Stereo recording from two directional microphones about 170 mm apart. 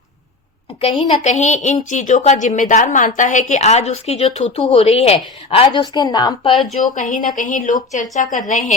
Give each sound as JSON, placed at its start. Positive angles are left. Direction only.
{"t": 1.2, "sound": "a woman's voice", "side_deg": 45}
{"t": 6.9, "sound": "speech", "side_deg": 50}